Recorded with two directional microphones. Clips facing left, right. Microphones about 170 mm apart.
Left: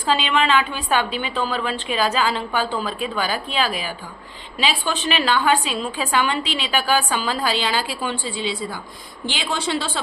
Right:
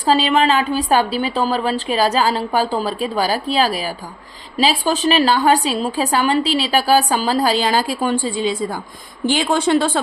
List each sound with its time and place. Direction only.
0.0 s a woman's voice: 40° right (ahead or behind)